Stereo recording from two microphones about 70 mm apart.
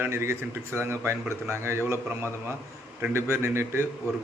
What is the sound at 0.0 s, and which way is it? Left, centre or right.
A man's voice, right.